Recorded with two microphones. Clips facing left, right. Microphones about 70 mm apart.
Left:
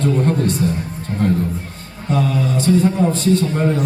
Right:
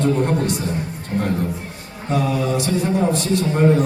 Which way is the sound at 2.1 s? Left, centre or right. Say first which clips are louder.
Left 1 dB; centre.